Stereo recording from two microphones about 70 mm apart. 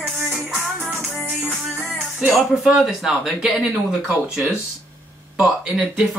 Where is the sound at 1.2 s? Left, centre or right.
Right.